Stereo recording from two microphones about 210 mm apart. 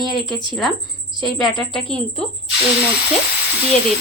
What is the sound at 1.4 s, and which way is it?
Speech, centre (ahead or behind).